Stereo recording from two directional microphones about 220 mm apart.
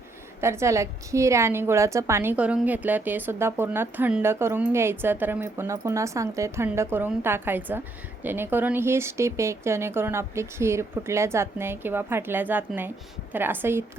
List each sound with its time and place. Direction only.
0.4 s a woman's voice: 10° right (ahead or behind)